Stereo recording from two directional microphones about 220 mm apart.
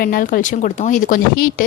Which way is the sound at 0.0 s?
40° left (ahead or behind).